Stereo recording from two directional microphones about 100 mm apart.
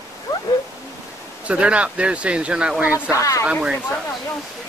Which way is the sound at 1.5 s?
10° right (ahead or behind).